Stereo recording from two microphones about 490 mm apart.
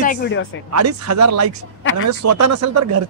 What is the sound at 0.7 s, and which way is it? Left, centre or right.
Speech, right.